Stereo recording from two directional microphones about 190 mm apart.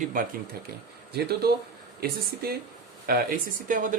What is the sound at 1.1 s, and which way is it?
Speech, 55° right (ahead or behind).